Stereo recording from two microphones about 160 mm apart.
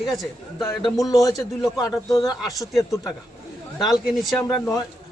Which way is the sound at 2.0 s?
20° left (ahead or behind).